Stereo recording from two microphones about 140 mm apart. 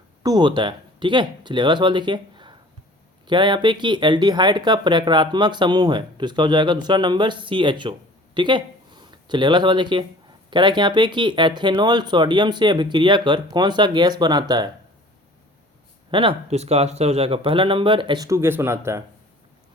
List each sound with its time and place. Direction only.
0.2 s speech: 30° right (ahead or behind)
16.1 s speech: 45° right (ahead or behind); by 19.0 s 20° right (ahead or behind)